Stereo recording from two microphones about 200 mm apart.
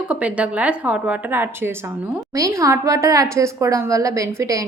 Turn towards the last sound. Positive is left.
turn(degrees=-15)  # may be behind; listen again after turning